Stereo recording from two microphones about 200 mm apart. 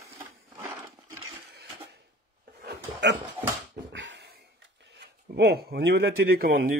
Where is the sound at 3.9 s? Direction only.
65° right (ahead or behind).